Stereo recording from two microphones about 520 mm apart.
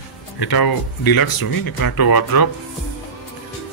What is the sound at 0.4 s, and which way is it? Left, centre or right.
Speech, left.